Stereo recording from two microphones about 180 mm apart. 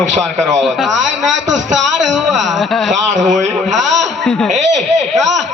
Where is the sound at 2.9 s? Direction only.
45° right (ahead or behind).